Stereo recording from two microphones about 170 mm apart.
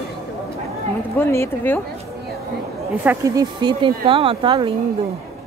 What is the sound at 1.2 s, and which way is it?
Speech, 15° left (ahead or behind).